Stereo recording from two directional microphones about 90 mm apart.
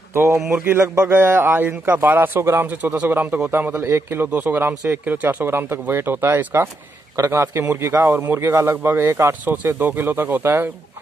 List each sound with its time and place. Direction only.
0.1 s a man's voice: 30° right (ahead or behind)